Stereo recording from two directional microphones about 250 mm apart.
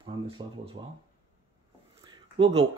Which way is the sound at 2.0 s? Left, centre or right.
Centre.